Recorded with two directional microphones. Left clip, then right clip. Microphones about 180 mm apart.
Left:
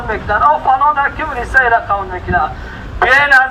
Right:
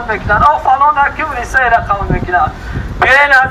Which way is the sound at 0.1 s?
20° right (ahead or behind).